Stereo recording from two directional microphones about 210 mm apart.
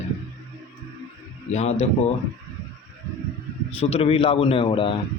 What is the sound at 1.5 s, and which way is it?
Speech, 30° left (ahead or behind).